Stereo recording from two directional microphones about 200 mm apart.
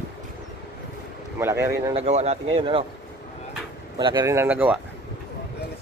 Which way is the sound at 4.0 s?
20° right (ahead or behind).